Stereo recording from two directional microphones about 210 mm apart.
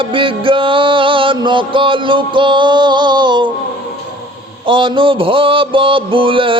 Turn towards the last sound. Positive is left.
turn(degrees=-25)  # may be behind; listen again after turning